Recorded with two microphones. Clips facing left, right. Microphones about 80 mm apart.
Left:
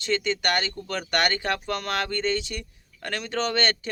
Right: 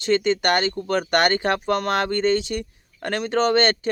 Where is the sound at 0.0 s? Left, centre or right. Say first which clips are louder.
Right 6 dB; right.